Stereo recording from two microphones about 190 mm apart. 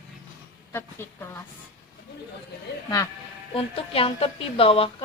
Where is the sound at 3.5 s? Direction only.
30° left (ahead or behind).